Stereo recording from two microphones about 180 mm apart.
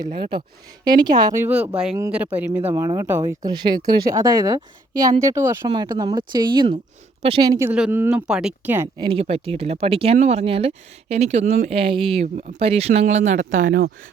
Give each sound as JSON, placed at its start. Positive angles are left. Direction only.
{"t": 0.2, "sound": "speech", "side_deg": -25}
{"t": 7.7, "sound": "speech", "side_deg": -10}
{"t": 9.0, "sound": "speech", "side_deg": -25}